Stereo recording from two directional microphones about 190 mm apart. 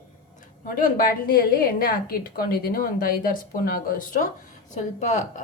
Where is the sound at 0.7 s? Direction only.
50° left (ahead or behind).